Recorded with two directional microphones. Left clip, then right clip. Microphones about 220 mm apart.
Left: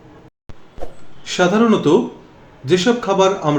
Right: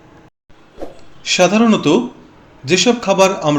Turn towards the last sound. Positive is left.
turn(degrees=-30)  # may be behind; listen again after turning